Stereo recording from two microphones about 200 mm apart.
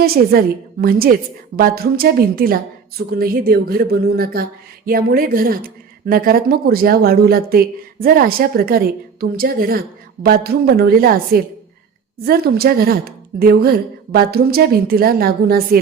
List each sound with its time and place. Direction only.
0.0 s a woman's voice: 50° right (ahead or behind)